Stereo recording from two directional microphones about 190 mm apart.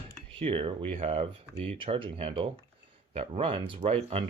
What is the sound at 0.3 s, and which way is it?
Speech, 30° right (ahead or behind).